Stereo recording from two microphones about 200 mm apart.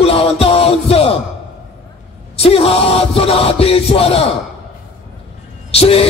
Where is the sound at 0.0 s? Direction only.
30° left (ahead or behind).